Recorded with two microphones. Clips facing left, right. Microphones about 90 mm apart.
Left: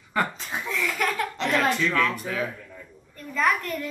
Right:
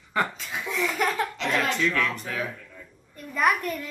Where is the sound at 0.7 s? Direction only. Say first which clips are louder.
Right 1 dB; 20° right (ahead or behind).